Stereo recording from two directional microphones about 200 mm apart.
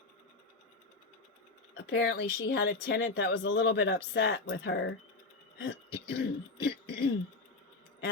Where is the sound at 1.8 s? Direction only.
60° left (ahead or behind).